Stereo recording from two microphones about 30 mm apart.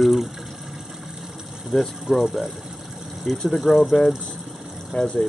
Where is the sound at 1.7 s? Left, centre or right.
Centre.